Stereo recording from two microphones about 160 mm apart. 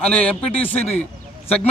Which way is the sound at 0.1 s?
10° left (ahead or behind).